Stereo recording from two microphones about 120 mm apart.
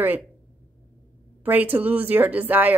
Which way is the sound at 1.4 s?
15° right (ahead or behind).